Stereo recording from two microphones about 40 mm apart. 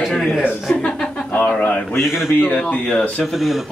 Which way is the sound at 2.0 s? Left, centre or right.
Centre.